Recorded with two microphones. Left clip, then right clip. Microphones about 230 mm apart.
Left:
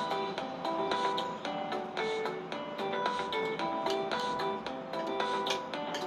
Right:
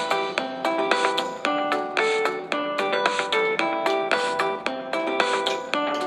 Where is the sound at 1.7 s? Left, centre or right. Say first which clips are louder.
Right 12 dB; right.